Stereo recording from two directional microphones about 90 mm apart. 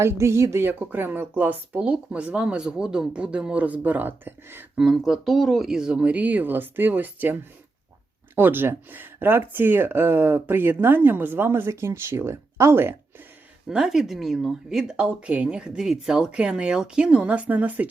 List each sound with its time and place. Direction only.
0.0 s speech: 30° right (ahead or behind)
4.8 s speech: 5° right (ahead or behind)
8.4 s speech: 25° right (ahead or behind)
13.7 s speech: 5° right (ahead or behind)